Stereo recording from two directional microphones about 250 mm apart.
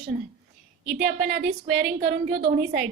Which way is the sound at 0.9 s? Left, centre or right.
Right.